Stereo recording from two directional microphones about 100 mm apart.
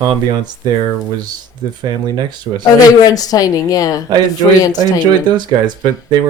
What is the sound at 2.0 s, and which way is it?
Speech, 45° right (ahead or behind).